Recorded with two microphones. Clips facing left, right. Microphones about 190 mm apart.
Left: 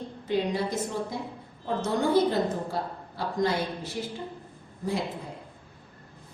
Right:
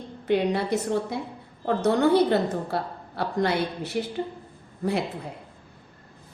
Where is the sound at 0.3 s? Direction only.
65° right (ahead or behind).